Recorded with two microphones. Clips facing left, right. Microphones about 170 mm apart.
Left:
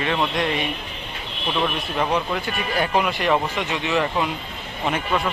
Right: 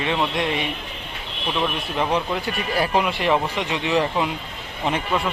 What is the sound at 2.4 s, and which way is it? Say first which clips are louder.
Speech: right 1 dB; 35° right (ahead or behind).